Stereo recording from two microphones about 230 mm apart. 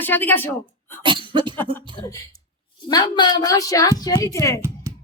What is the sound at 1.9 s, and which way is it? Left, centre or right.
A woman's voice, centre.